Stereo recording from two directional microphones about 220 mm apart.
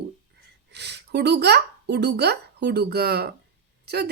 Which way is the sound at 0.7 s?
50° right (ahead or behind).